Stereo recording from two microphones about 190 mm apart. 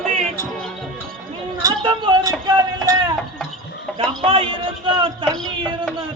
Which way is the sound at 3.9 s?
30° right (ahead or behind).